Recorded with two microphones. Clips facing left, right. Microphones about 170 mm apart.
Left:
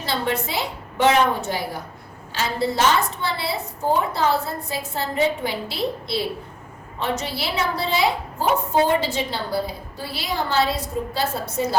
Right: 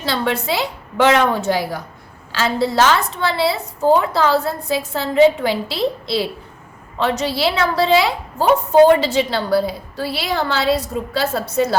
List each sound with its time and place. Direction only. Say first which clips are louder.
0.0 s a woman's voice: right 4 dB; 90° right